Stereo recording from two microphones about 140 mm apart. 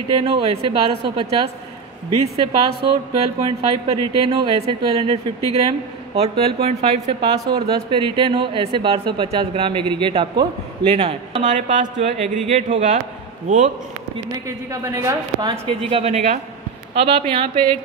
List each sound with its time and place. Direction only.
0.2 s a man's voice: 40° right (ahead or behind)
11.4 s speech: 65° right (ahead or behind)
14.7 s a woman's voice: 25° right (ahead or behind)
15.6 s speech: 45° right (ahead or behind)
16.9 s a man's voice: 45° right (ahead or behind)